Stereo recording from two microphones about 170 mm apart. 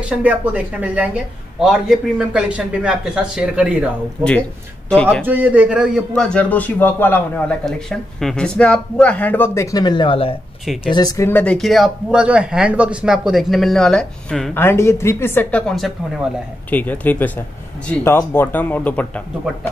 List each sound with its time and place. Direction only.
0.0 s speech: 10° right (ahead or behind)
4.2 s a man's voice: 5° left (ahead or behind)
5.2 s a man's voice: 10° right (ahead or behind)
14.6 s a man's voice: 15° left (ahead or behind)